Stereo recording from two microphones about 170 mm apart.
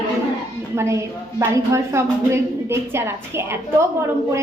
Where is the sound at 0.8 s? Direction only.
15° right (ahead or behind).